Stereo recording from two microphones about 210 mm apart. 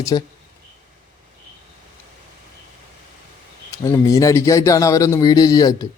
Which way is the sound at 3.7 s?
15° left (ahead or behind).